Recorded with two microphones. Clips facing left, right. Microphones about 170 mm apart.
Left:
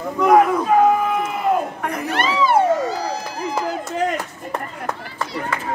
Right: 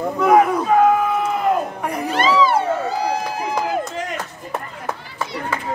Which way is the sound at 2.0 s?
60° left (ahead or behind).